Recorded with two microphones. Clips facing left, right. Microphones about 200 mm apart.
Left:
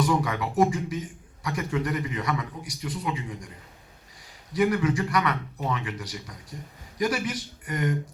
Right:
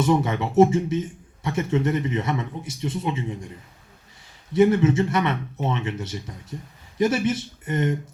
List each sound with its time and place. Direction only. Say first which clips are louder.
0.0 s a man's voice: right 4 dB; 25° right (ahead or behind)
4.5 s a man's voice: right 6 dB; 25° right (ahead or behind)